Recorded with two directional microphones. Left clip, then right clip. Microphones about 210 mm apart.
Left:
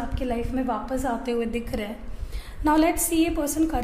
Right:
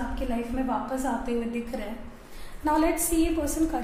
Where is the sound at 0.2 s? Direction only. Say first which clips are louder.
Left 4 dB; 50° left (ahead or behind).